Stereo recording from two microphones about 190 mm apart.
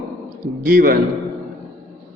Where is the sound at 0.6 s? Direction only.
50° right (ahead or behind).